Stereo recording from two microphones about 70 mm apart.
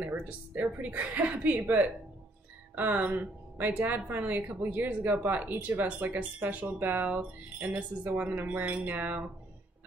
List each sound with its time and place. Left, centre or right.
0.0 s speech: right